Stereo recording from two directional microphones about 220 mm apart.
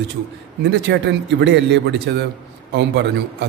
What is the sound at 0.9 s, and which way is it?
Speech, 50° right (ahead or behind).